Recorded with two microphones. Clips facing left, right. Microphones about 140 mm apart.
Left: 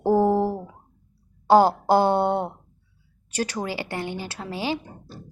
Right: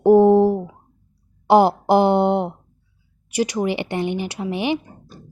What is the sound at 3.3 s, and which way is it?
Speech, 15° right (ahead or behind).